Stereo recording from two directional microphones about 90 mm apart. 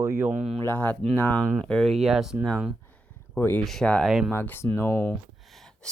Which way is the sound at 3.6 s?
5° left (ahead or behind).